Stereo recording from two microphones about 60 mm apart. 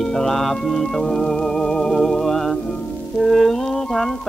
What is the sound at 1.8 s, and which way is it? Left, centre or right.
Music, centre.